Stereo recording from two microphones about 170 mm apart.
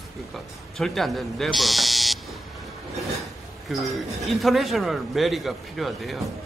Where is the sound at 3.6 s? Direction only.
Centre (ahead or behind).